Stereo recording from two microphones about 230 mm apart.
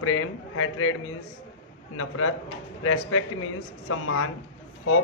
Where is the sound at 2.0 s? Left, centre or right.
Left.